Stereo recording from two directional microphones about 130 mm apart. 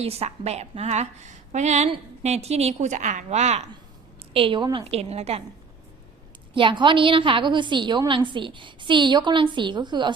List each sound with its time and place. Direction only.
0.0 s a woman's voice: 50° right (ahead or behind)
4.4 s a woman's voice: 40° right (ahead or behind)
4.9 s a woman's voice: 55° right (ahead or behind)
6.5 s a woman's voice: 40° right (ahead or behind)